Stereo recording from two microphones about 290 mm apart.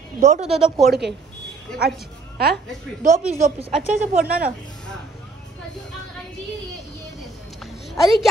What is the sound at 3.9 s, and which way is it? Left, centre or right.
Speech, right.